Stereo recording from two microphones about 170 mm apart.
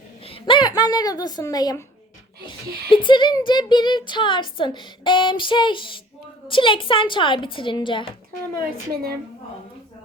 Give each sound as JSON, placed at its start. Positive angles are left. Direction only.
{"t": 0.3, "sound": "a sound", "side_deg": 30}
{"t": 0.8, "sound": "speech", "side_deg": 20}
{"t": 2.9, "sound": "speech", "side_deg": 30}